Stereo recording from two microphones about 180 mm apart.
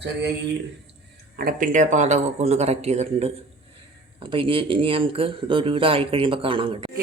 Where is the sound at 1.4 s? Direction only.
50° right (ahead or behind); by 6.9 s 30° right (ahead or behind).